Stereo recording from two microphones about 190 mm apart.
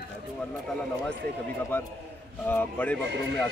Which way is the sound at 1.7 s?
10° left (ahead or behind).